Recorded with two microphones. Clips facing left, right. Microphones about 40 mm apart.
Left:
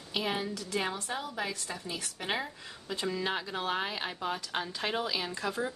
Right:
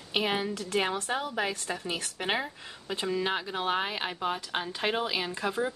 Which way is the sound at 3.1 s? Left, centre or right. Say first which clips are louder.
Right 3 dB; centre.